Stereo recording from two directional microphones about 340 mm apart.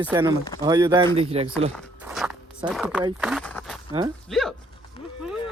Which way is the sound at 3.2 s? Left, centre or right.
Centre.